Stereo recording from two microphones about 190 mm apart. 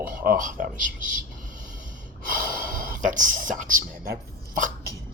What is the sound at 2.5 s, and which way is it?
Speech, 45° right (ahead or behind).